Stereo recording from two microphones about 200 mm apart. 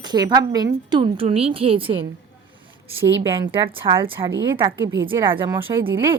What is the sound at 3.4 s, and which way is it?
A woman's voice, 25° right (ahead or behind).